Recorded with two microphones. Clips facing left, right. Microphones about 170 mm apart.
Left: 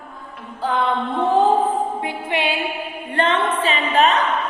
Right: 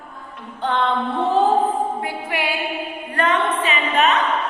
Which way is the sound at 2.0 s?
20° left (ahead or behind).